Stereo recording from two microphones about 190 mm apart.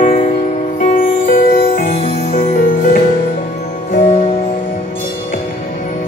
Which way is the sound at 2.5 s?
45° left (ahead or behind).